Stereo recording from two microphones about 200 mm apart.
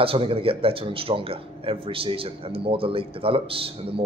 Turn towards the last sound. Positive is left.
turn(degrees=-25)  # may be behind; listen again after turning